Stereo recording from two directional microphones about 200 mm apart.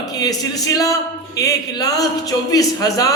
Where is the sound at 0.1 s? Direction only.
20° left (ahead or behind).